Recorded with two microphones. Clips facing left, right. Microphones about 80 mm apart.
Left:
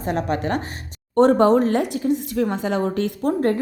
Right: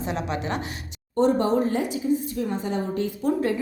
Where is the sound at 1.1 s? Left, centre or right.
Left.